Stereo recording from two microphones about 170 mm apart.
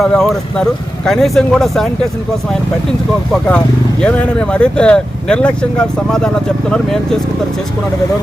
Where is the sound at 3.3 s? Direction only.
5° left (ahead or behind).